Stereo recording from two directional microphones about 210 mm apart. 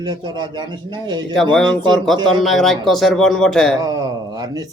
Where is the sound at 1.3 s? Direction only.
Centre (ahead or behind).